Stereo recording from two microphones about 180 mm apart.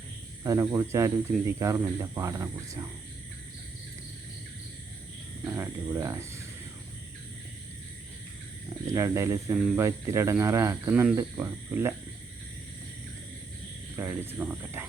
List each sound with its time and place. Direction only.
0.4 s speech: 15° right (ahead or behind)
5.5 s speech: 15° right (ahead or behind)
8.9 s speech: 15° right (ahead or behind)
13.9 s speech: 10° right (ahead or behind)